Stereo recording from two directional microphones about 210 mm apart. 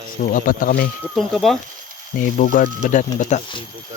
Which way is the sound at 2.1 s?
40° left (ahead or behind).